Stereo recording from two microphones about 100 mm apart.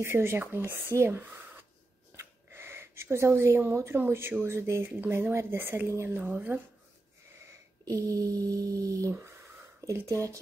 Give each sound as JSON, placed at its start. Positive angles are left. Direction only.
{"t": 0.0, "sound": "speech", "side_deg": -25}
{"t": 7.3, "sound": "a sound", "side_deg": -25}
{"t": 7.8, "sound": "mantra", "side_deg": -35}
{"t": 9.8, "sound": "speech", "side_deg": -30}